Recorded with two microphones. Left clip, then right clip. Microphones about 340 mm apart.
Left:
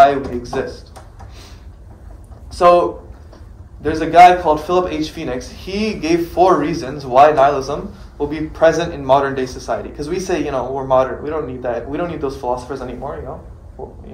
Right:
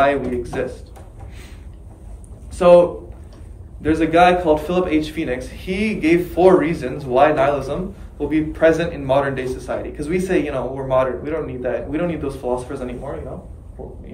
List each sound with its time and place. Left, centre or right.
0.0 s a man's voice: centre
2.5 s speech: centre
3.8 s a man's voice: centre